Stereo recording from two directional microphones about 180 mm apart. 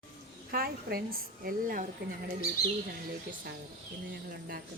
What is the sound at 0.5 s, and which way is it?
Speech, 55° right (ahead or behind).